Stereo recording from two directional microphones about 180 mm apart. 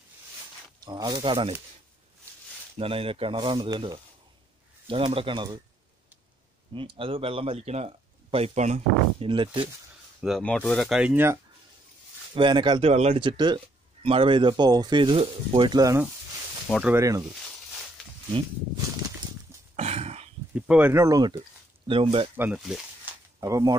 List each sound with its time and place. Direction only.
0.8 s speech: 20° right (ahead or behind)
2.8 s speech: 30° right (ahead or behind)
6.7 s speech: 30° right (ahead or behind)
9.3 s speech: 25° right (ahead or behind)
10.2 s speech: centre (ahead or behind)
12.4 s speech: 25° right (ahead or behind)
19.7 s a sound: 35° right (ahead or behind)
20.5 s speech: 5° right (ahead or behind); by 22.3 s 30° right (ahead or behind)
22.4 s speech: 5° right (ahead or behind)
23.4 s speech: 15° right (ahead or behind)